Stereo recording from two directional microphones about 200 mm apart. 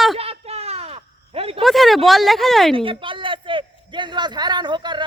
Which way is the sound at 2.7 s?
25° right (ahead or behind).